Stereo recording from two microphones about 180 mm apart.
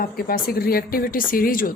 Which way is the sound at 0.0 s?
55° left (ahead or behind).